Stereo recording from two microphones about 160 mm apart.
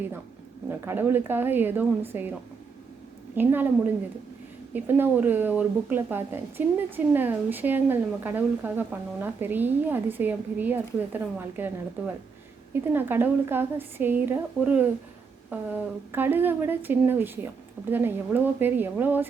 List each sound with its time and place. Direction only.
0.7 s a woman's voice: 15° right (ahead or behind)
3.3 s a woman's voice: 10° right (ahead or behind)